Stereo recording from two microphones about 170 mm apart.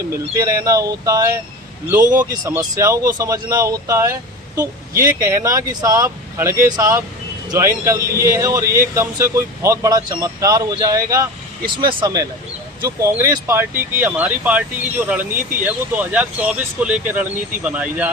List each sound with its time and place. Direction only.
0.1 s speech: 20° right (ahead or behind)
2.0 s speech: 50° right (ahead or behind)
2.4 s speech: 20° right (ahead or behind)
5.2 s speech: 15° right (ahead or behind)